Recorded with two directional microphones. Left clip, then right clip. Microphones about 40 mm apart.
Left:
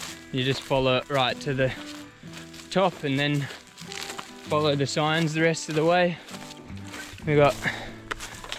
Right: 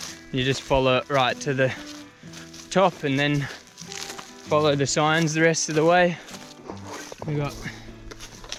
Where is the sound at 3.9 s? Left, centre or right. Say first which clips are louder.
Even; centre.